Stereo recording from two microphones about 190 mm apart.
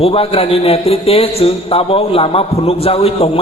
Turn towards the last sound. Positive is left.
turn(degrees=30)  # may be behind; listen again after turning